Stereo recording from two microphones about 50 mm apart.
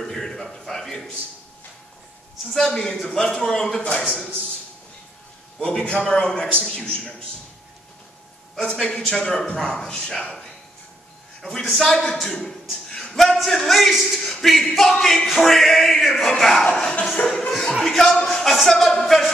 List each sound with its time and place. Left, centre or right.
0.0 s a sound: centre
2.4 s a man's voice: centre
5.6 s a man's voice: centre
8.5 s a man's voice: centre
11.4 s a man's voice: centre
13.7 s a sound: centre
17.1 s a man's voice: centre